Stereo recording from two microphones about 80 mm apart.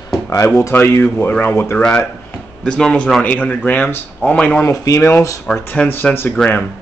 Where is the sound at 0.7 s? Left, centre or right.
Left.